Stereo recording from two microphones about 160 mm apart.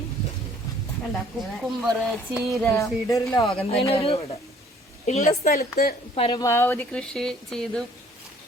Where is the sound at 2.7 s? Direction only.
20° left (ahead or behind).